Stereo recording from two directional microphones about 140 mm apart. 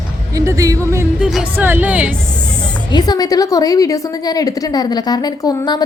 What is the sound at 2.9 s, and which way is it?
A woman's voice, 30° left (ahead or behind).